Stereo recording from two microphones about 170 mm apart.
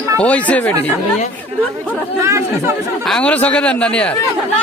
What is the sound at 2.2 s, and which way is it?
Speech, 15° right (ahead or behind).